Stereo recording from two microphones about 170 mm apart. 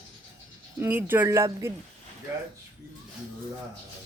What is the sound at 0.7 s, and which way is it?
Speech, 10° right (ahead or behind).